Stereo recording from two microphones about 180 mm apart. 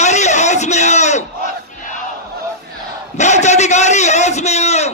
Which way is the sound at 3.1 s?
40° left (ahead or behind).